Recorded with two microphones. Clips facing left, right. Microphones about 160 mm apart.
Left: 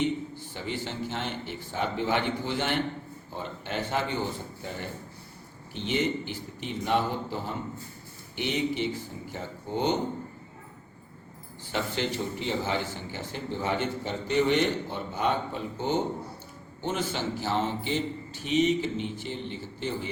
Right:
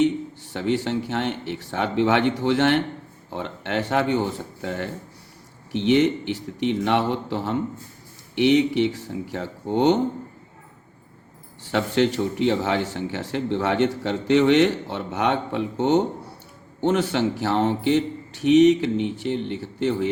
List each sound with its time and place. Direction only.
0.5 s a man's voice: 75° right (ahead or behind)
11.6 s a man's voice: 70° right (ahead or behind)